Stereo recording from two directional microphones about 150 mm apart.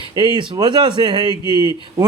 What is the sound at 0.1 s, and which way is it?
A man's voice, 30° right (ahead or behind).